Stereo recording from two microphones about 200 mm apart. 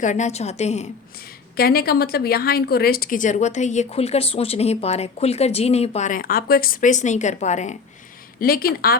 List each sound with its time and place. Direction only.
0.0 s a woman's voice: 35° left (ahead or behind)
1.5 s a woman's voice: 50° left (ahead or behind)
8.4 s a woman's voice: 50° left (ahead or behind)